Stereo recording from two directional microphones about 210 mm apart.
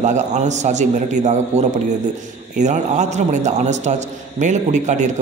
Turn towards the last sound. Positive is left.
turn(degrees=-35)  # may be behind; listen again after turning